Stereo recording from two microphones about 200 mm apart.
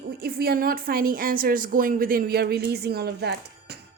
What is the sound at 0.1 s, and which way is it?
A woman's voice, 50° right (ahead or behind).